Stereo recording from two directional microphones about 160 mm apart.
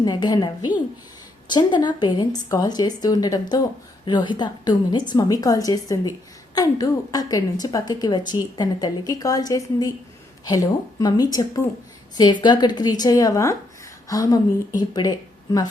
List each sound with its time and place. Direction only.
0.0 s a woman's voice: 25° left (ahead or behind)